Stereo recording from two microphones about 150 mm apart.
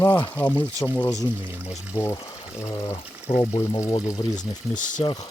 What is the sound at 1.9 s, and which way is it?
Speech, 15° left (ahead or behind).